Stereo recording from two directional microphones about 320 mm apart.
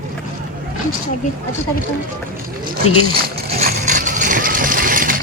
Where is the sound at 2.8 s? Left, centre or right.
Left.